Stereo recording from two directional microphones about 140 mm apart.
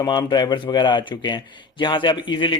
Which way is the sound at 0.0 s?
30° left (ahead or behind).